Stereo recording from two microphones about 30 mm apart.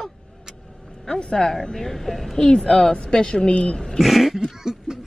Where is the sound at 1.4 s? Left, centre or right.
Left.